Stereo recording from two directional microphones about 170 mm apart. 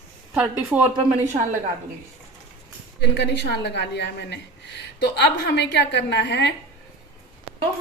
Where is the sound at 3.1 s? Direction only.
90° left.